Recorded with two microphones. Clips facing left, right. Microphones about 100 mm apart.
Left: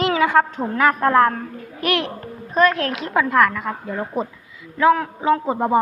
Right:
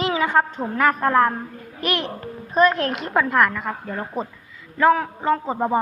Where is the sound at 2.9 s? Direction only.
Centre (ahead or behind).